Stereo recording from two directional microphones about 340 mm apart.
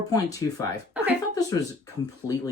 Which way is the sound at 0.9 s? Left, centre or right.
Centre.